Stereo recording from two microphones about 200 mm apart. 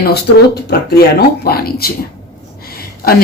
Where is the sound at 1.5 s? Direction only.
50° left (ahead or behind).